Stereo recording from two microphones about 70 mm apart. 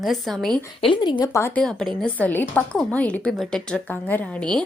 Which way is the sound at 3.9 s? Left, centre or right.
Left.